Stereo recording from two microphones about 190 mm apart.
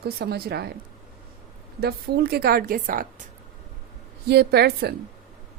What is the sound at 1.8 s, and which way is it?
Speech, 55° right (ahead or behind).